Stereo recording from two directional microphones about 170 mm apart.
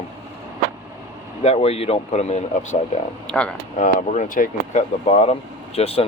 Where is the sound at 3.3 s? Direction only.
5° left (ahead or behind).